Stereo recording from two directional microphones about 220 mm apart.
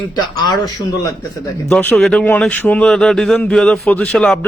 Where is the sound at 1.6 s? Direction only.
5° left (ahead or behind).